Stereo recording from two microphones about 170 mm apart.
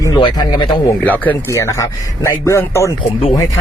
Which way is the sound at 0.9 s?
10° left (ahead or behind).